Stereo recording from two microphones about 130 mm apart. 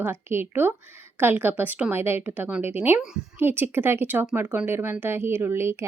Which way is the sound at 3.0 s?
5° right (ahead or behind).